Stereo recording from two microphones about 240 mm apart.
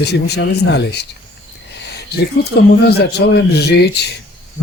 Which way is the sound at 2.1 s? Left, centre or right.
Left.